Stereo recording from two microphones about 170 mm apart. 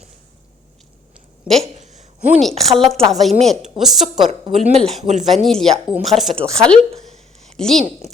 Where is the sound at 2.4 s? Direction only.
Centre (ahead or behind).